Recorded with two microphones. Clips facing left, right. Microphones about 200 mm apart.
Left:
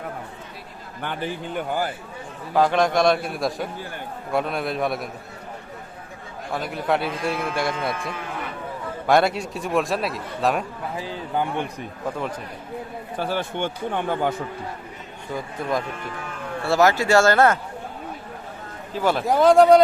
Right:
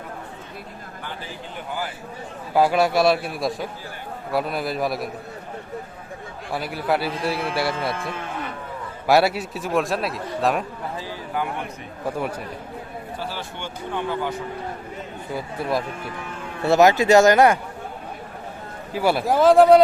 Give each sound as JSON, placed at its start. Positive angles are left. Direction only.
{"t": 1.0, "sound": "speech", "side_deg": 60}
{"t": 2.6, "sound": "a man's voice", "side_deg": -10}
{"t": 6.5, "sound": "a man's voice", "side_deg": -5}
{"t": 9.0, "sound": "a man's voice", "side_deg": -5}
{"t": 11.0, "sound": "a sound", "side_deg": 20}
{"t": 13.1, "sound": "speech", "side_deg": 55}
{"t": 16.6, "sound": "speech", "side_deg": -20}
{"t": 18.9, "sound": "a man's voice", "side_deg": -10}